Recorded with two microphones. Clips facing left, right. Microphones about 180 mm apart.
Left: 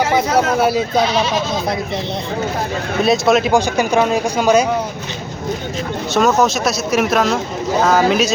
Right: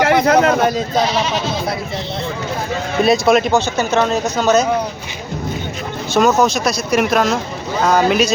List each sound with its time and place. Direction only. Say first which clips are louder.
0.0 s speech: right 3 dB; 65° right (ahead or behind)
0.6 s speech: left 1 dB; 10° left (ahead or behind)
3.0 s speech: right 1 dB; centre (ahead or behind)
3.5 s speech: left 1 dB; 10° left (ahead or behind)
6.1 s speech: right 1 dB; centre (ahead or behind)